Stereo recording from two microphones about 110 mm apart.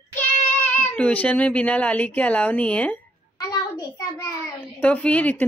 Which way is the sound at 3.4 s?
30° left (ahead or behind).